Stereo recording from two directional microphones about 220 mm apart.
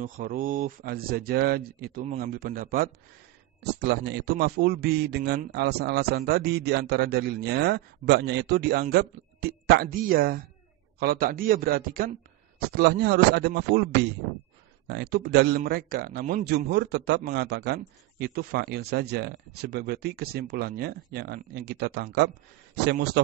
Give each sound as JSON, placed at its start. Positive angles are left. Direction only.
{"t": 0.0, "sound": "a man's voice", "side_deg": -35}
{"t": 14.9, "sound": "a man's voice", "side_deg": -45}